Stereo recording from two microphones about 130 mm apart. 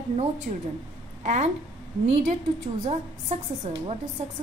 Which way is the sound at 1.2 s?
70° right (ahead or behind).